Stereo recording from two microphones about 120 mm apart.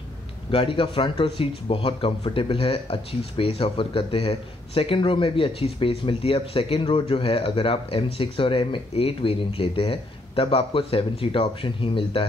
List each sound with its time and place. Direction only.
0.5 s speech: 50° left (ahead or behind)